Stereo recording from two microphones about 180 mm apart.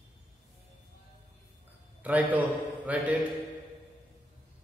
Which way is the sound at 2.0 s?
10° right (ahead or behind).